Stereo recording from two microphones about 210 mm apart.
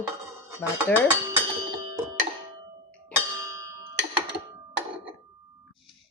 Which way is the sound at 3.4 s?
15° right (ahead or behind).